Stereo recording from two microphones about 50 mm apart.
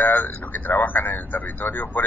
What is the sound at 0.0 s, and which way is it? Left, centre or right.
A man's voice, left.